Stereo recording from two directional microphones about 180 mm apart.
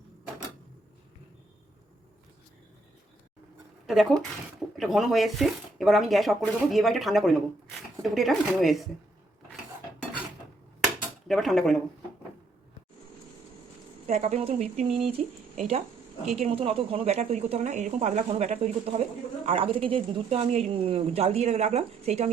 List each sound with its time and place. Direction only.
3.8 s speech: centre (ahead or behind)
11.3 s speech: centre (ahead or behind)
14.1 s speech: 40° right (ahead or behind)